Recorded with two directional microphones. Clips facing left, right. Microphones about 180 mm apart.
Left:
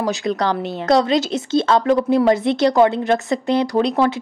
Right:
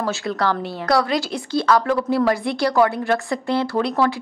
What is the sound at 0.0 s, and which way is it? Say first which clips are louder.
Speech: left 2 dB; 20° left (ahead or behind).